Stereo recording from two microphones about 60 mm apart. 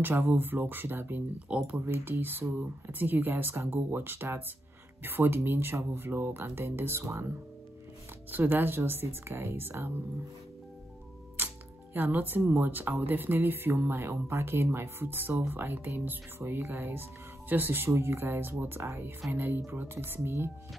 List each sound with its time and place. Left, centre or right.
0.0 s speech: right
1.5 s speech: centre
1.9 s speech: right
8.3 s speech: right
11.3 s music: right
12.4 s speech: right